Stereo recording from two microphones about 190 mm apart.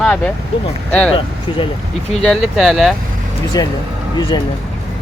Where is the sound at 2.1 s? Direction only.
5° left (ahead or behind).